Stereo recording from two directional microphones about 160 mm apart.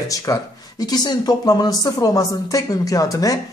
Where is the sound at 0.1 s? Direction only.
20° left (ahead or behind).